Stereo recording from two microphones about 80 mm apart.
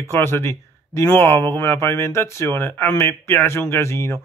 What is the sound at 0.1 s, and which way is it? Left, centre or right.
Speech, left.